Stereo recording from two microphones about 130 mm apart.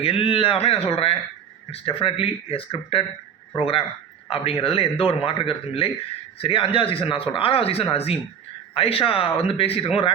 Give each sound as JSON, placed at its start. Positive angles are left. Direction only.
{"t": 0.0, "sound": "a man's voice", "side_deg": 45}